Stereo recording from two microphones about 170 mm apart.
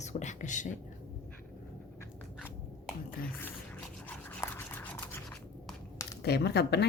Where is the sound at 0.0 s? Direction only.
45° left (ahead or behind).